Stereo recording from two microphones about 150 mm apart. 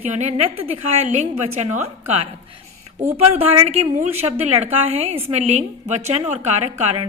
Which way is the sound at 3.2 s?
40° right (ahead or behind).